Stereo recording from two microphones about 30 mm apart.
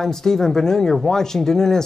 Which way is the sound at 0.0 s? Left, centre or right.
Centre.